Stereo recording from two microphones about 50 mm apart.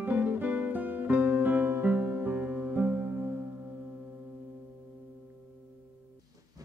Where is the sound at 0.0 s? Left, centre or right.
Right.